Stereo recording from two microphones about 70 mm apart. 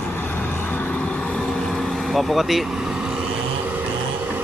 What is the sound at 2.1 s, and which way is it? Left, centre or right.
Speech, centre.